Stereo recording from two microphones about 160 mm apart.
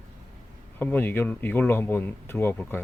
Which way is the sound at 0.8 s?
10° left (ahead or behind).